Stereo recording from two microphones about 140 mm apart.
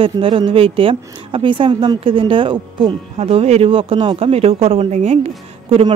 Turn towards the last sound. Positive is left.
turn(degrees=-45)  # may be behind; listen again after turning